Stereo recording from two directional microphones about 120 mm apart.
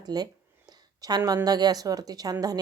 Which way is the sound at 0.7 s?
30° right (ahead or behind).